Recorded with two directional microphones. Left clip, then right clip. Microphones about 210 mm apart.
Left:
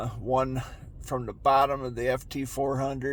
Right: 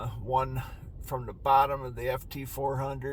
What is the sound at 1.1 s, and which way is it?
Speech, 55° left (ahead or behind).